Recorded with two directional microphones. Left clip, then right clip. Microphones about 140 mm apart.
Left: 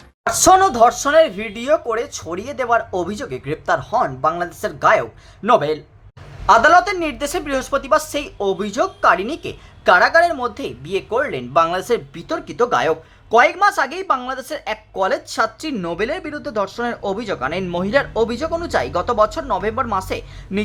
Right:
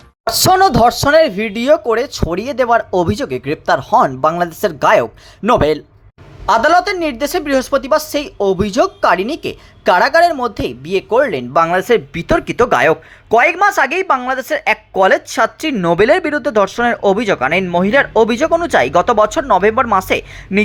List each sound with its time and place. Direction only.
0.3 s speech: 30° right (ahead or behind)
3.9 s speech: 45° right (ahead or behind)
6.4 s a woman's voice: 20° right (ahead or behind)
12.2 s speech: 40° right (ahead or behind)
15.8 s speech: 40° right (ahead or behind)